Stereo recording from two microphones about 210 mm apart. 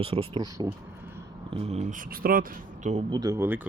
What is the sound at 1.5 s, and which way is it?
Speech, 30° right (ahead or behind).